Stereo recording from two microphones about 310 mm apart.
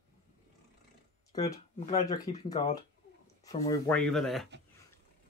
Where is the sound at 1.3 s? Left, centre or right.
Centre.